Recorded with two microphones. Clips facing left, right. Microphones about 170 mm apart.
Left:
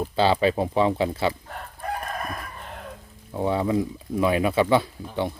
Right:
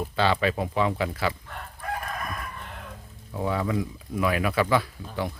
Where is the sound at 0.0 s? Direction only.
30° left (ahead or behind).